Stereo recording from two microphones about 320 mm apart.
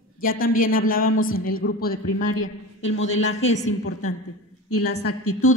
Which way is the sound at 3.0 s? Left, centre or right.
Left.